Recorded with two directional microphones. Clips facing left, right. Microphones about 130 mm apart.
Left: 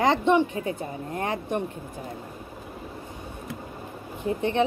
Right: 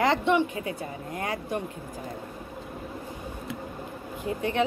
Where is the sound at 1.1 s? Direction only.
30° left (ahead or behind).